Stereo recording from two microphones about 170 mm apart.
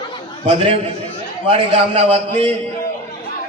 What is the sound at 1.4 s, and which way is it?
A man's voice, 35° right (ahead or behind).